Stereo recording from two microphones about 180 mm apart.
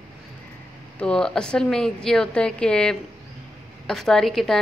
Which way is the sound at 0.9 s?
5° left (ahead or behind).